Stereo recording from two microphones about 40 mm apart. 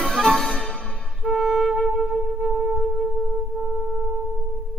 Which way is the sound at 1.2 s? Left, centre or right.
Centre.